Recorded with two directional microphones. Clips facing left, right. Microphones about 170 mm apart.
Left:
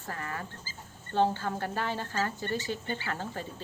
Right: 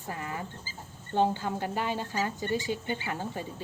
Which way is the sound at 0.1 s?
15° right (ahead or behind).